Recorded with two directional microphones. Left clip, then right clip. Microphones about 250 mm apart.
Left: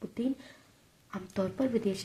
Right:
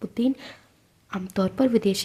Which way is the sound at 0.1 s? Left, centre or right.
Right.